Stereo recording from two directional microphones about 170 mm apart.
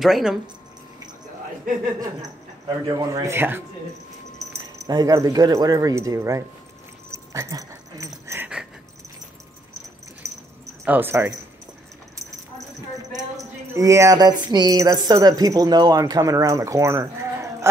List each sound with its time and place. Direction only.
0.0 s speech: centre (ahead or behind)
2.9 s a man's voice: 20° right (ahead or behind)
4.8 s speech: 20° right (ahead or behind)
7.1 s dog: 15° right (ahead or behind)
10.2 s dog: 20° right (ahead or behind)
10.9 s a man's voice: 10° right (ahead or behind)
13.4 s a woman's voice: 20° right (ahead or behind)